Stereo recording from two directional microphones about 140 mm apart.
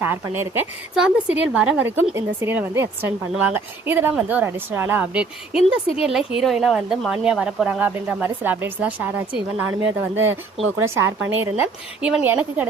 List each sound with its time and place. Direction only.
0.0 s a woman's voice: 15° right (ahead or behind)